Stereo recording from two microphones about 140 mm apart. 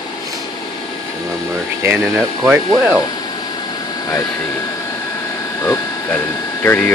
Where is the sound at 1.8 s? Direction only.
15° right (ahead or behind).